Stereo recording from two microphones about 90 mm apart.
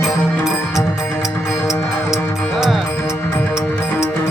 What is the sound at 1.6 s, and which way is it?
Music, 30° left (ahead or behind).